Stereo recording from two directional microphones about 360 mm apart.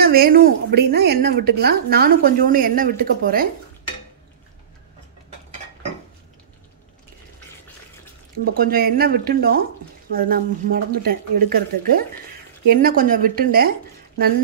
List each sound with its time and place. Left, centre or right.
0.0 s a woman's voice: right
8.5 s a woman's voice: right